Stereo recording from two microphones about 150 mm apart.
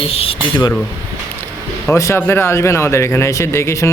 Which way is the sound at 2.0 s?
15° left (ahead or behind).